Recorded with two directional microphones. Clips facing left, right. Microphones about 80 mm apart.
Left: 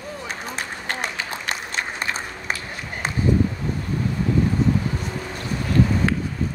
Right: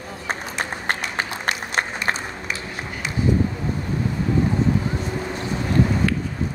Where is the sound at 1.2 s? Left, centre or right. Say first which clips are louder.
Right 3 dB; right.